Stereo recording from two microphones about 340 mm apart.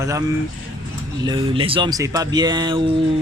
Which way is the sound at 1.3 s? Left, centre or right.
Centre.